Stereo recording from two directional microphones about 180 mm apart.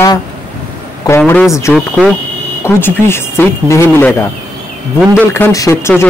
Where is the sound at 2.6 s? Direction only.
15° left (ahead or behind).